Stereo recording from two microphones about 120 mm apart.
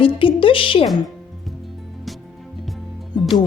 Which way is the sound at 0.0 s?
45° left (ahead or behind).